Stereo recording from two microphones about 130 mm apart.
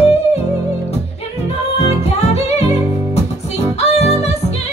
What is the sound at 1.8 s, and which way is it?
Music, 55° left (ahead or behind).